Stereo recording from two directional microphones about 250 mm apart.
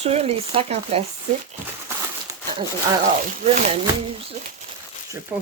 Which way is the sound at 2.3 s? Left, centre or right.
Centre.